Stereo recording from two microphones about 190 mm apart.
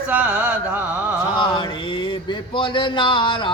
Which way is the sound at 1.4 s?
25° left (ahead or behind).